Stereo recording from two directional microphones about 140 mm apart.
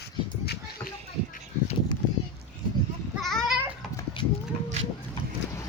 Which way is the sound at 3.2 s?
Centre (ahead or behind).